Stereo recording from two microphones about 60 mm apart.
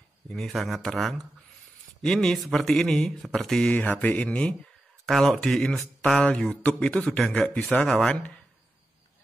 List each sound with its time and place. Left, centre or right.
0.5 s speech: centre
2.2 s speech: centre
3.7 s speech: left
5.0 s speech: centre; by 7.2 s left
7.2 s speech: centre